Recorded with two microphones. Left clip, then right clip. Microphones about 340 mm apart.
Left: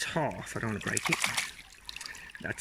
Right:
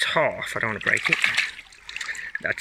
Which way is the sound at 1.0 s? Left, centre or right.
Centre.